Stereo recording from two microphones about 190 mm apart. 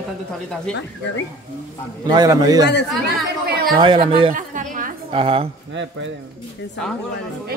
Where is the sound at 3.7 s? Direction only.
25° right (ahead or behind).